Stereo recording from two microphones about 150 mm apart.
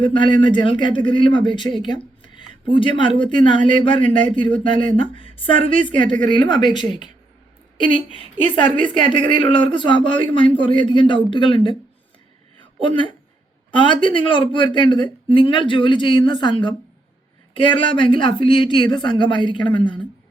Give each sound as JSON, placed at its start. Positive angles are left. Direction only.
{"t": 0.0, "sound": "a woman's voice", "side_deg": 35}
{"t": 2.2, "sound": "a sound", "side_deg": 35}
{"t": 3.2, "sound": "a woman's voice", "side_deg": 30}
{"t": 7.8, "sound": "speech", "side_deg": -55}
{"t": 8.1, "sound": "a woman's voice", "side_deg": 35}
{"t": 12.8, "sound": "a woman's voice", "side_deg": 35}